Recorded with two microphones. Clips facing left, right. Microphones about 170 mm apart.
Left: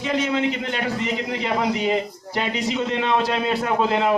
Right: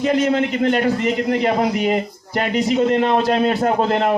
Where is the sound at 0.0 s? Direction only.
50° right (ahead or behind).